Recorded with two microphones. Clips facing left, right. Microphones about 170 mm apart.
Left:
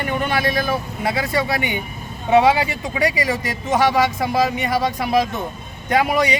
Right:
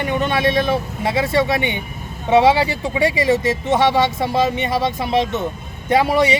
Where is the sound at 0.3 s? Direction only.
25° right (ahead or behind).